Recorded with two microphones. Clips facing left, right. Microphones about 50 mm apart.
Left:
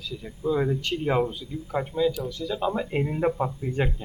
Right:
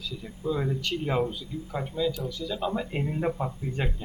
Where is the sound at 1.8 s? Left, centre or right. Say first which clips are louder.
Left 4 dB; centre.